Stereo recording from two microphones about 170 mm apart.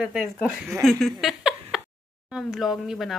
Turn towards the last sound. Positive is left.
turn(degrees=0)  # may be behind; listen again after turning